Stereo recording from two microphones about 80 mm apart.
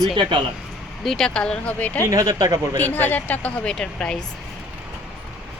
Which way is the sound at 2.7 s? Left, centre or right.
Left.